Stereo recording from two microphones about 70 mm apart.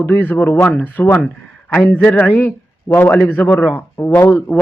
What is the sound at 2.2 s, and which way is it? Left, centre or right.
A man's voice, left.